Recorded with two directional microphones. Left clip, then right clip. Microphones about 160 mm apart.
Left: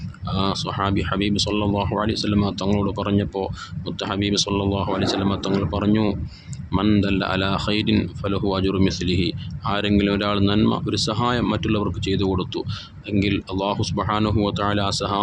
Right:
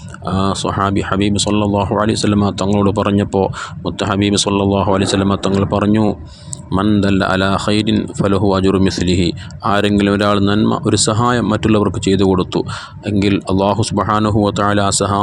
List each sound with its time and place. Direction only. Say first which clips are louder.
0.3 s speech: right 7 dB; 45° right (ahead or behind)
7.0 s speech: right 8 dB; 45° right (ahead or behind)